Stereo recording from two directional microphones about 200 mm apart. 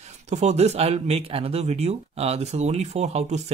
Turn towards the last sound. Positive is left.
turn(degrees=-35)  # may be behind; listen again after turning